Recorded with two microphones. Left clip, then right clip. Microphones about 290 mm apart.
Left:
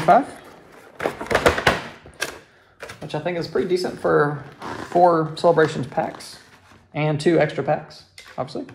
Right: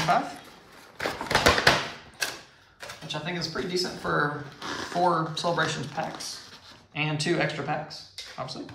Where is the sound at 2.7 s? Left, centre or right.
Centre.